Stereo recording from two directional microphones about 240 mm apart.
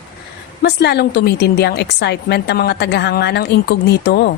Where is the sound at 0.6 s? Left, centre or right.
Left.